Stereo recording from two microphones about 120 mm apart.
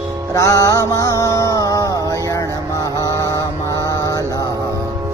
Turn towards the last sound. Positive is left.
turn(degrees=30)  # may be behind; listen again after turning